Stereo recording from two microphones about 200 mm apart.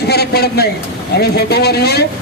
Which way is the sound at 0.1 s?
55° left (ahead or behind).